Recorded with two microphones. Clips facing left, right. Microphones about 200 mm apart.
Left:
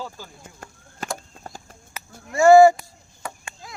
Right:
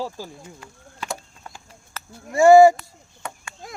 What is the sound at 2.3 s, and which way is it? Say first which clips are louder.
Speech: right 1 dB; 20° right (ahead or behind).